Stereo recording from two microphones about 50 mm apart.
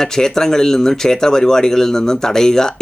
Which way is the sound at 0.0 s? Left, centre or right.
Centre.